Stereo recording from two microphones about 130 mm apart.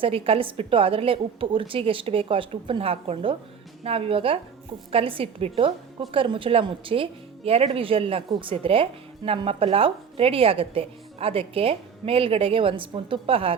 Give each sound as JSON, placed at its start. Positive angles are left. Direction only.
{"t": 0.0, "sound": "a woman's voice", "side_deg": -45}